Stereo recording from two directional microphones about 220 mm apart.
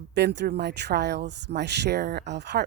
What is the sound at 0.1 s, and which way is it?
Speech, 50° right (ahead or behind).